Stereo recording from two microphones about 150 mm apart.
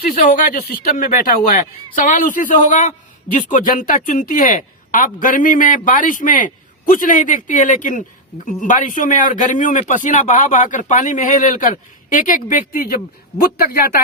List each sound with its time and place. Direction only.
0.3 s speech: 65° left (ahead or behind); by 14.0 s 80° left